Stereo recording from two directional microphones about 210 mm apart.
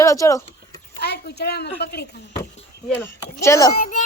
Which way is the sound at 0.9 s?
50° left (ahead or behind).